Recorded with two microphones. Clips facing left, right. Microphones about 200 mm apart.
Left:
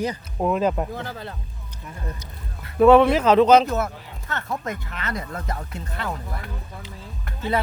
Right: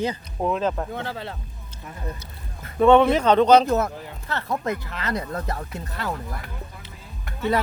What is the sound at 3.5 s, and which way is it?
Speech, 35° right (ahead or behind).